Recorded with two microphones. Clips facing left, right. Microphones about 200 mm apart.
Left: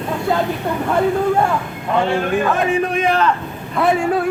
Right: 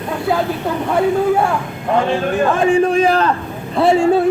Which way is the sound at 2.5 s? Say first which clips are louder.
Right 5 dB; 30° right (ahead or behind).